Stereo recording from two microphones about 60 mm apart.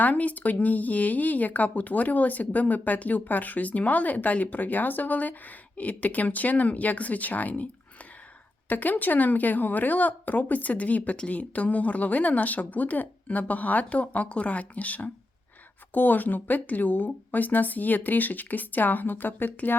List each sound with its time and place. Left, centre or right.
0.0 s speech: left
8.7 s speech: left